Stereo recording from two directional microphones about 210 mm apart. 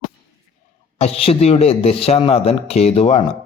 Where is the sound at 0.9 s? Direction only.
30° left (ahead or behind).